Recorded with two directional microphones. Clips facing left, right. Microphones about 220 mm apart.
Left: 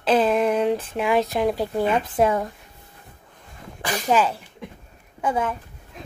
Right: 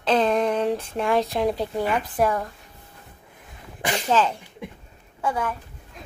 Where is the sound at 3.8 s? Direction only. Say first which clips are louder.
Right 1 dB; 25° right (ahead or behind).